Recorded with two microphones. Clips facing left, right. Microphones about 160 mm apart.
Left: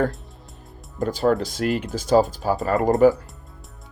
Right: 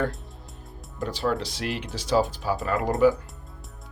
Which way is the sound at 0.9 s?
45° left (ahead or behind).